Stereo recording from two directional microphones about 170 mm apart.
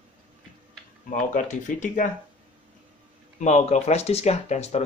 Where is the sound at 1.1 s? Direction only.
50° left (ahead or behind).